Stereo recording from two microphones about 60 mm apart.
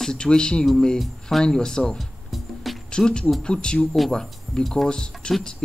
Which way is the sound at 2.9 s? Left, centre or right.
Centre.